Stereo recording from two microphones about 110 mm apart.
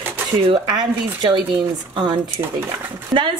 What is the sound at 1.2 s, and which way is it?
A woman's voice, 45° right (ahead or behind).